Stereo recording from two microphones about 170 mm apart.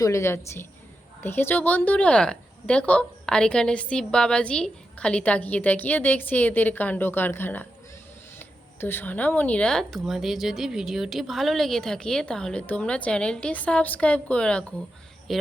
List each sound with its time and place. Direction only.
0.0 s a woman's voice: 15° left (ahead or behind); by 15.4 s centre (ahead or behind)